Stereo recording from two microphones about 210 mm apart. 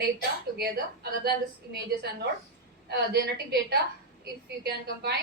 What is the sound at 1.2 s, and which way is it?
A woman's voice, 50° right (ahead or behind).